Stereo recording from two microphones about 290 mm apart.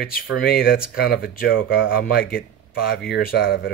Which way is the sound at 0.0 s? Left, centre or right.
Left.